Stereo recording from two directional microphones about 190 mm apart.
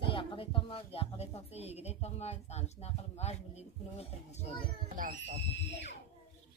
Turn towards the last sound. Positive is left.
turn(degrees=70)  # may be behind; listen again after turning